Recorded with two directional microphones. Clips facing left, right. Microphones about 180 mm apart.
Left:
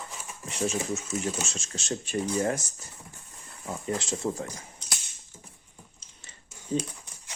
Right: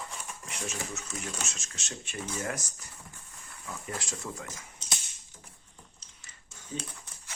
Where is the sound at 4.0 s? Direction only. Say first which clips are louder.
Left 9 dB; 30° left (ahead or behind).